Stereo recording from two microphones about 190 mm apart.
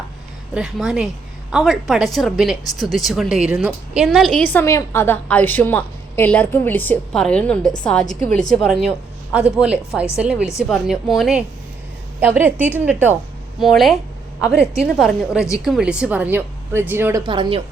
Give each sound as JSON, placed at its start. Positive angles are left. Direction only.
{"t": 0.5, "sound": "a woman's voice", "side_deg": 0}
{"t": 17.2, "sound": "speech", "side_deg": -25}